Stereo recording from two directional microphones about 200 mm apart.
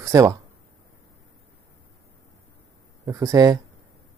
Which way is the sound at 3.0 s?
15° right (ahead or behind).